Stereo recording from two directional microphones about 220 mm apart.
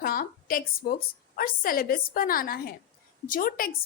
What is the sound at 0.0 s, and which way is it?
A woman's voice, 40° left (ahead or behind).